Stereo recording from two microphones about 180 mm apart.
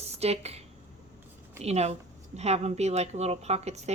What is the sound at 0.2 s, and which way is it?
Speech, 35° right (ahead or behind).